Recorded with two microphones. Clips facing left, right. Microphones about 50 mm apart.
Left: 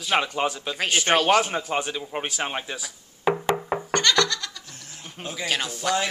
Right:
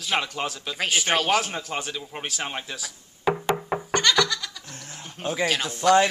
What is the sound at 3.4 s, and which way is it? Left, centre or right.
Music, centre.